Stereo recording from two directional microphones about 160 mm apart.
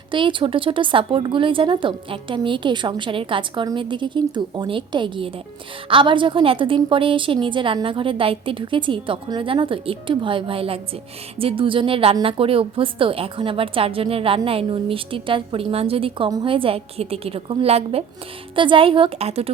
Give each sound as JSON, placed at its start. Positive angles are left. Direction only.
{"t": 0.1, "sound": "a woman's voice", "side_deg": -30}